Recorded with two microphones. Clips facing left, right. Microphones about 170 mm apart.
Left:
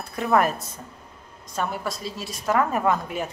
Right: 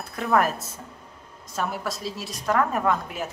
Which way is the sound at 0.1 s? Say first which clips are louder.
Left 1 dB; centre (ahead or behind).